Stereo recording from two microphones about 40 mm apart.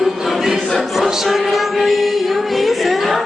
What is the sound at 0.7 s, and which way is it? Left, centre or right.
Music, centre.